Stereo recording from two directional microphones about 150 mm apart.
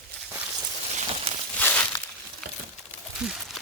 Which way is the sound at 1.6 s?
10° left (ahead or behind).